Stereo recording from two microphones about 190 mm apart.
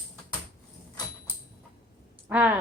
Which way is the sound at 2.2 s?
10° right (ahead or behind).